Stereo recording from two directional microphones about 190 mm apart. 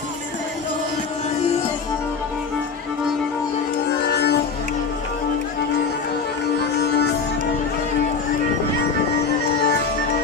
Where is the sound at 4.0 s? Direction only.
60° left (ahead or behind).